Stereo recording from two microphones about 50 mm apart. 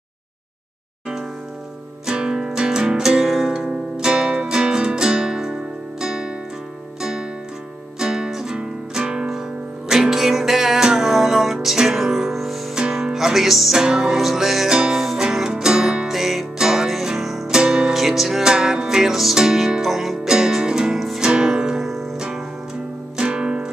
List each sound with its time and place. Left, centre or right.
2.0 s music: centre
12.7 s music: centre
17.6 s music: centre
17.9 s music: centre
23.1 s music: centre